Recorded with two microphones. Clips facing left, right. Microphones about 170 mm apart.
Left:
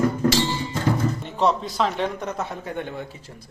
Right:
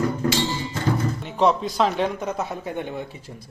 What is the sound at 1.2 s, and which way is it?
Speech, centre (ahead or behind).